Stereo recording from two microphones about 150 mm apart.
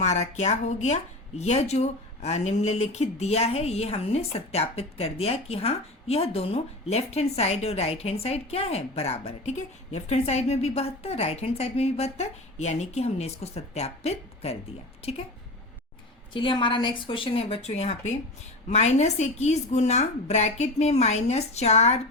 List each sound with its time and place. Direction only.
0.0 s speech: 50° left (ahead or behind)
16.3 s a woman's voice: 30° left (ahead or behind)